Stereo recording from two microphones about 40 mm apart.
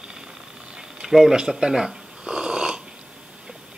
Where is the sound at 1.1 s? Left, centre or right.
Centre.